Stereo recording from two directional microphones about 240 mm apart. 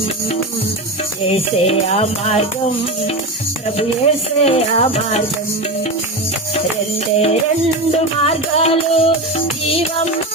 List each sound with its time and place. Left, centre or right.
1.2 s music: left
3.8 s music: left
7.9 s music: left